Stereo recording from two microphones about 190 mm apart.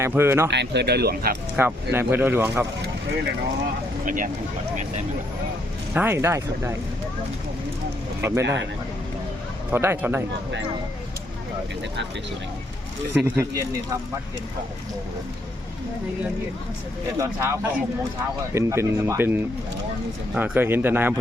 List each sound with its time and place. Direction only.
0.0 s speech: 15° right (ahead or behind)
0.5 s speech: 65° right (ahead or behind)
1.5 s speech: 10° right (ahead or behind)
4.0 s speech: 45° right (ahead or behind)
5.9 s speech: 10° right (ahead or behind)
8.2 s speech: 15° right (ahead or behind)
9.7 s speech: 10° right (ahead or behind)
13.2 s speech: 10° right (ahead or behind)
17.2 s speech: 15° right (ahead or behind)